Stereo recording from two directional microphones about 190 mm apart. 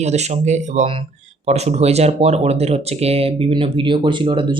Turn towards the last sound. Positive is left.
turn(degrees=-25)  # may be behind; listen again after turning